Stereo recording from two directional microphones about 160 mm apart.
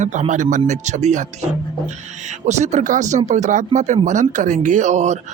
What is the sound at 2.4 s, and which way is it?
Speech, 45° right (ahead or behind).